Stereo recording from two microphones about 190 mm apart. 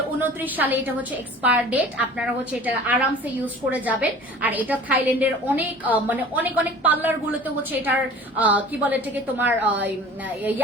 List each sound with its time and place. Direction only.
0.2 s a woman's voice: 10° right (ahead or behind)